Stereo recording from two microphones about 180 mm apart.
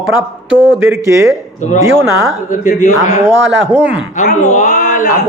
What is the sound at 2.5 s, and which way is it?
Speech, 45° left (ahead or behind).